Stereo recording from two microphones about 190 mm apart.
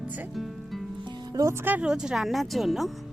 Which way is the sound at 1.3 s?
15° right (ahead or behind).